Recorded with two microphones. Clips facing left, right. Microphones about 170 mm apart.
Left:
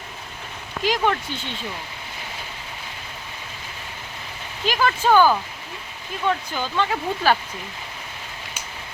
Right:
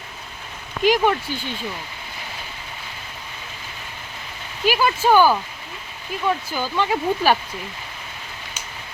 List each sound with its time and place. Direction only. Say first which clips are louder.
0.8 s speech: right 4 dB; 15° right (ahead or behind)
4.6 s speech: right 2 dB; 10° right (ahead or behind)